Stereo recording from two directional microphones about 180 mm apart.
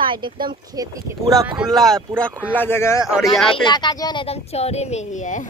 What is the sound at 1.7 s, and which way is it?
Speech, centre (ahead or behind).